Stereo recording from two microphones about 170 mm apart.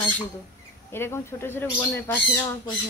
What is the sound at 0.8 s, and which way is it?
Speech, 15° left (ahead or behind).